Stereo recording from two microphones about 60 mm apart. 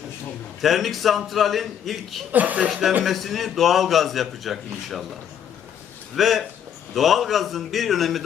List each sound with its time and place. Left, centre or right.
0.6 s a man's voice: centre
2.3 s speech: right
2.6 s a man's voice: centre
6.1 s a man's voice: centre